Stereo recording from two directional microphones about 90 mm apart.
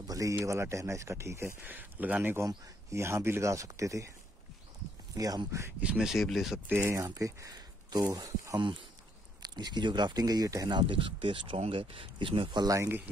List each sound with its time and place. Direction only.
0.0 s a man's voice: 40° right (ahead or behind)
1.6 s speech: 20° right (ahead or behind)
2.4 s speech: 30° right (ahead or behind)
5.1 s speech: 40° right (ahead or behind)
5.8 s speech: 10° right (ahead or behind)
6.7 s speech: 25° right (ahead or behind)
7.0 s speech: 40° right (ahead or behind)
9.4 s speech: 55° right (ahead or behind)
10.7 s speech: 65° right (ahead or behind)
12.8 s speech: 25° right (ahead or behind)